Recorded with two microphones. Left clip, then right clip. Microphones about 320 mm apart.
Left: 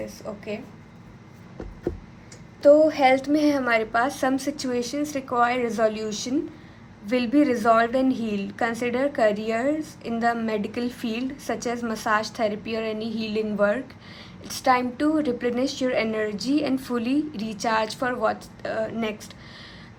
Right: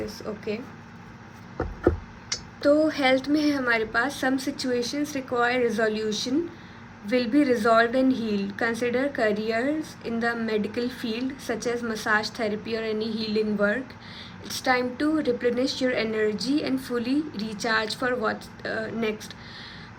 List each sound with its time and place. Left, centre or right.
2.6 s a woman's voice: centre
8.0 s a woman's voice: centre
8.4 s a woman's voice: centre